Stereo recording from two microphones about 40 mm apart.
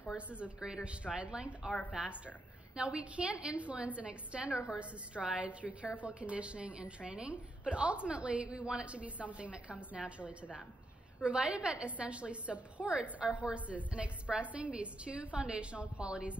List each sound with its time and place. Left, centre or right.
0.6 s a woman's voice: right